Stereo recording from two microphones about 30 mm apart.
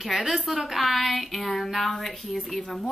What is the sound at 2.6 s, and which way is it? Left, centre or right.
Speech, centre.